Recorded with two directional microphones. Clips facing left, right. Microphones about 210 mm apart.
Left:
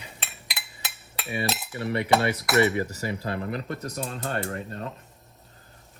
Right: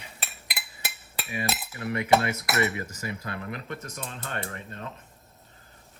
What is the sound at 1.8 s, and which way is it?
Cutlery, 30° left (ahead or behind).